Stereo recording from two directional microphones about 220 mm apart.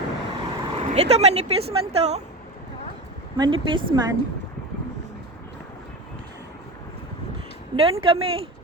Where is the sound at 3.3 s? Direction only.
20° right (ahead or behind).